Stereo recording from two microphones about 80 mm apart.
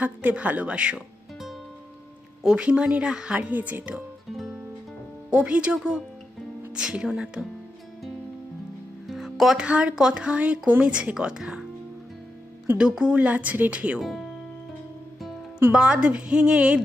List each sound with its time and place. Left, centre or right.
0.0 s speech: centre
2.4 s speech: centre
4.3 s music: centre
5.3 s speech: centre
9.0 s music: centre
9.6 s speech: centre
12.7 s speech: centre
14.0 s speech: centre
15.2 s music: centre
15.7 s speech: centre